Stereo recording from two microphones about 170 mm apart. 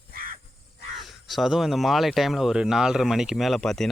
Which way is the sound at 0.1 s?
60° right (ahead or behind).